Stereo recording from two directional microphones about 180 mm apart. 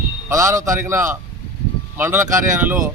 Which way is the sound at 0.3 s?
15° right (ahead or behind).